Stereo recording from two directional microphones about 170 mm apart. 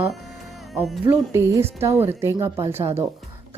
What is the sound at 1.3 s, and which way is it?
A woman's voice, 15° right (ahead or behind).